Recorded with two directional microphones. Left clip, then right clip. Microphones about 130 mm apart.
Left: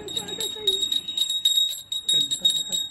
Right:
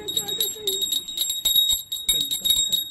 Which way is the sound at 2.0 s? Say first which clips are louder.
Left 2 dB; centre (ahead or behind).